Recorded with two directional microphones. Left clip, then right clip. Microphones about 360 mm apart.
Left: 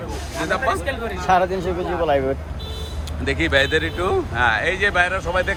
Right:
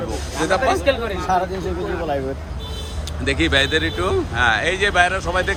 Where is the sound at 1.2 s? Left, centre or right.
Left.